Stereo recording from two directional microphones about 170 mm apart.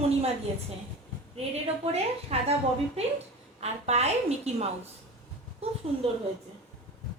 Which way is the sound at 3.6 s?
40° right (ahead or behind).